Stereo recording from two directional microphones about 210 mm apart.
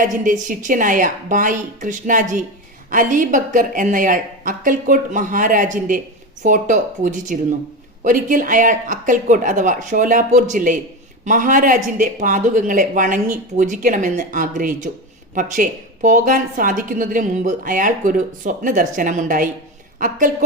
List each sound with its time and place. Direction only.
0.0 s a woman's voice: 40° right (ahead or behind)